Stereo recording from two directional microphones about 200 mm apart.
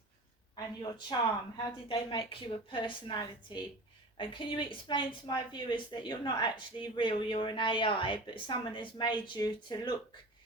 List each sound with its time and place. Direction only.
0.5 s a woman's voice: 20° left (ahead or behind)